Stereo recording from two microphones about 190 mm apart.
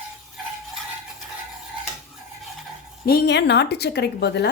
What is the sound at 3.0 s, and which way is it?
A woman's voice, 60° left (ahead or behind).